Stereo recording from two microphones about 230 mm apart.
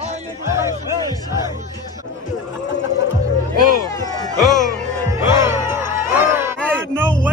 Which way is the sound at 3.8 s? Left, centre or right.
Centre.